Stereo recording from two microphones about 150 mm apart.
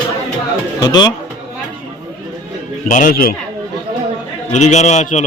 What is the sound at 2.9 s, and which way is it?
Speech, 60° left (ahead or behind).